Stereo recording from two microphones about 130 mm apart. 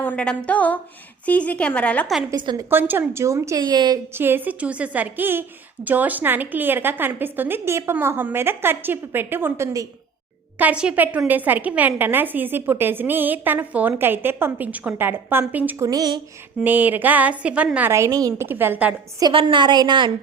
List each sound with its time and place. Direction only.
0.0 s a sound: 10° left (ahead or behind)
1.2 s a woman's voice: 10° left (ahead or behind)
2.3 s a woman's voice: 30° right (ahead or behind)
2.6 s a woman's voice: 15° right (ahead or behind)
3.6 s a woman's voice: 35° right (ahead or behind)
4.1 s a woman's voice: 15° right (ahead or behind)
15.9 s a woman's voice: 30° right (ahead or behind)
16.6 s a woman's voice: 15° right (ahead or behind)
19.2 s a woman's voice: 40° right (ahead or behind)